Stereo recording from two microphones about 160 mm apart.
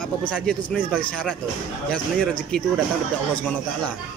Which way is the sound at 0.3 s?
10° left (ahead or behind).